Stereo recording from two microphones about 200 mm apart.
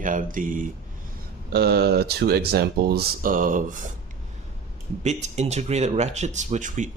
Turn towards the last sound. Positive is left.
turn(degrees=-40)  # may be behind; listen again after turning